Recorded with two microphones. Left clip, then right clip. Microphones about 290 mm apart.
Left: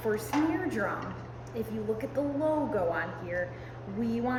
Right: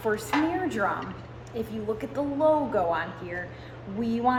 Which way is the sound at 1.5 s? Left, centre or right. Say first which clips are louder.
Right 2 dB; centre.